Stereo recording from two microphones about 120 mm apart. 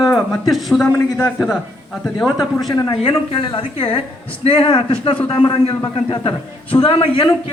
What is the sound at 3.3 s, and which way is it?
A man's voice, 45° left (ahead or behind).